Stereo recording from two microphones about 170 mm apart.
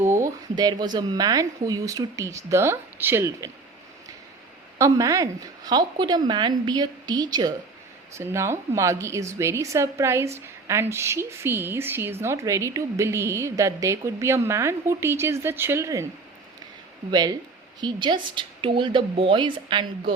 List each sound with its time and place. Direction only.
0.0 s speech: 15° right (ahead or behind)
4.8 s a woman's voice: 20° right (ahead or behind)
17.1 s speech: 25° right (ahead or behind)